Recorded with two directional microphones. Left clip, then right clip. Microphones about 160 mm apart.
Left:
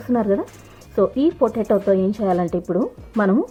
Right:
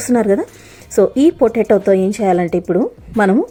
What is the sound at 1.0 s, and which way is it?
Speech, 20° right (ahead or behind).